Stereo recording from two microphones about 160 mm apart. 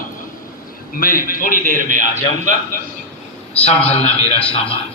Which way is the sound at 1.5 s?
55° right (ahead or behind).